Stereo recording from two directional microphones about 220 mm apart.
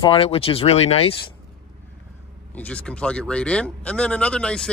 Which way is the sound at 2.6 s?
5° left (ahead or behind).